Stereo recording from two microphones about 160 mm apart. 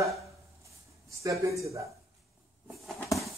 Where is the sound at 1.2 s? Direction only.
20° right (ahead or behind).